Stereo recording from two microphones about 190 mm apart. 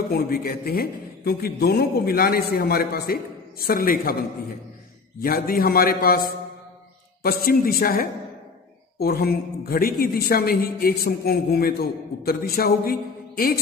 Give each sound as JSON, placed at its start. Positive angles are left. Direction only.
{"t": 0.1, "sound": "a man's voice", "side_deg": 50}
{"t": 5.2, "sound": "a man's voice", "side_deg": 50}
{"t": 7.2, "sound": "a man's voice", "side_deg": 55}